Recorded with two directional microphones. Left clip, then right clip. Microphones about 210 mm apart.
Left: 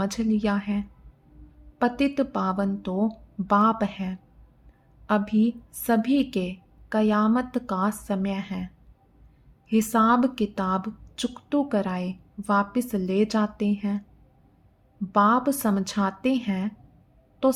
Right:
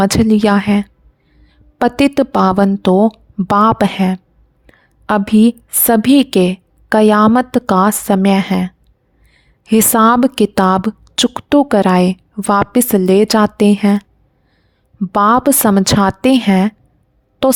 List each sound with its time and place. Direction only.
0.0 s a woman's voice: 50° right (ahead or behind)
15.1 s a woman's voice: 50° right (ahead or behind)